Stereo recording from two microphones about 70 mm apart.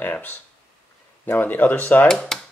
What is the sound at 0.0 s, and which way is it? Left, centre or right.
Speech, left.